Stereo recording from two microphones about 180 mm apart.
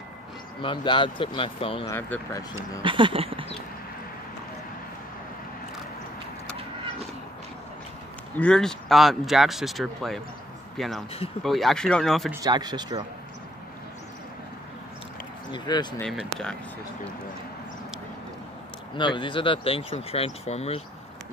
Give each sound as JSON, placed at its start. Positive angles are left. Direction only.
{"t": 0.6, "sound": "speech", "side_deg": 25}
{"t": 1.9, "sound": "speech", "side_deg": 15}
{"t": 2.8, "sound": "speech", "side_deg": -30}
{"t": 8.4, "sound": "speech", "side_deg": 5}
{"t": 12.3, "sound": "speech", "side_deg": -20}
{"t": 15.5, "sound": "speech", "side_deg": 25}
{"t": 16.0, "sound": "speech", "side_deg": 0}
{"t": 18.9, "sound": "speech", "side_deg": 25}